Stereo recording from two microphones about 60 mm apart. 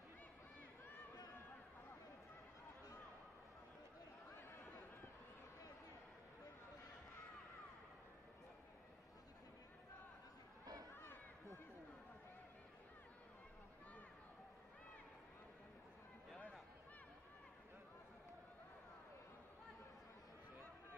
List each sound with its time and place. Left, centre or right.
10.6 s run: right